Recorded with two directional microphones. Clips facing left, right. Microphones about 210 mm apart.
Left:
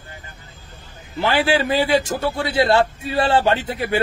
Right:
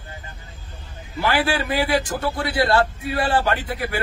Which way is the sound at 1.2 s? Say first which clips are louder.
Left 3 dB; 25° left (ahead or behind).